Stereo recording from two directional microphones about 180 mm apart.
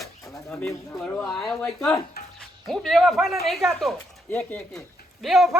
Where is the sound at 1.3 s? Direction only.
Centre (ahead or behind).